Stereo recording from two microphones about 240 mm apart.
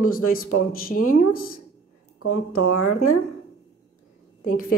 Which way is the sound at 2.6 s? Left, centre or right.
Left.